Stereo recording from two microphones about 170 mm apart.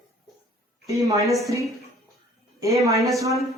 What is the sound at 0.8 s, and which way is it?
Speech, 20° right (ahead or behind).